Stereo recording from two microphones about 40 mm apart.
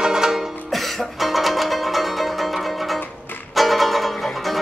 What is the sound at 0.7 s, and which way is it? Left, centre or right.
Music, centre.